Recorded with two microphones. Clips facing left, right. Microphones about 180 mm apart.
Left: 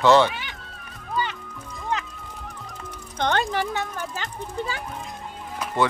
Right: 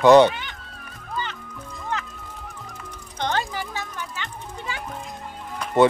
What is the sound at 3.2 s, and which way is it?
Music, 60° left (ahead or behind).